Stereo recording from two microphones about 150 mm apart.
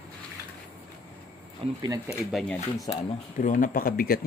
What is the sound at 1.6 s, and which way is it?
Speech, 40° right (ahead or behind).